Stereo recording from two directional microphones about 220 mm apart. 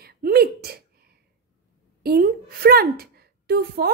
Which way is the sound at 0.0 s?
45° right (ahead or behind).